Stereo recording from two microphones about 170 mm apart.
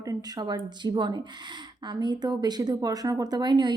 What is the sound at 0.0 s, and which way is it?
Speech, 20° right (ahead or behind).